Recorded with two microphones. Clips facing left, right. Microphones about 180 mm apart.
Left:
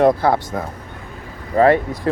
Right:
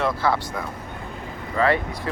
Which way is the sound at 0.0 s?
45° left (ahead or behind).